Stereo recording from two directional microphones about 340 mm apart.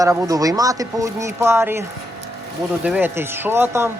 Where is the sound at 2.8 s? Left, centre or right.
Centre.